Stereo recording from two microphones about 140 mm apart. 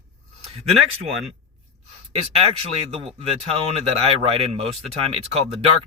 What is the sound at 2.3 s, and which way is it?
A man's voice, 40° right (ahead or behind).